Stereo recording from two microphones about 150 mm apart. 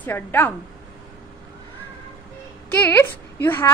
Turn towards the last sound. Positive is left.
turn(degrees=15)  # may be behind; listen again after turning